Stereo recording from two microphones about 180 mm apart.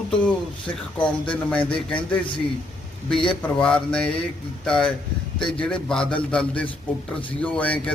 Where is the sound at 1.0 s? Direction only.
5° left (ahead or behind).